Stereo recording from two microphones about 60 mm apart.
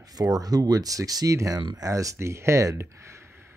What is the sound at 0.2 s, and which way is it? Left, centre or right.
Speech, right.